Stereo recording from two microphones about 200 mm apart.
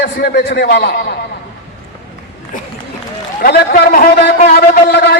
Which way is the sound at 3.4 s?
50° left (ahead or behind).